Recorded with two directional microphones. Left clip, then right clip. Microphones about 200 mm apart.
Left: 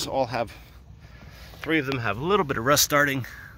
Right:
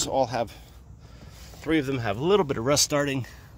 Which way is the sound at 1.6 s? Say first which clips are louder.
Left 1 dB; 15° right (ahead or behind).